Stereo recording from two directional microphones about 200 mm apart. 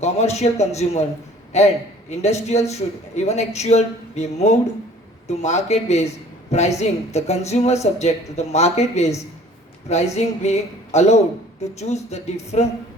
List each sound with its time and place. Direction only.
0.0 s a man's voice: 35° left (ahead or behind)
10.2 s a man's voice: 35° left (ahead or behind)